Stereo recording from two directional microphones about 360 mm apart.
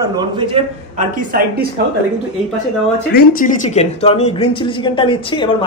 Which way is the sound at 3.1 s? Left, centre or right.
Left.